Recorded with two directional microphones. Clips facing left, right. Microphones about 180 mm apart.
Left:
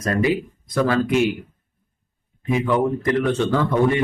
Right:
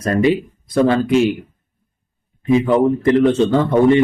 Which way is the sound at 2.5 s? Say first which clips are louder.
Right 6 dB; 30° right (ahead or behind).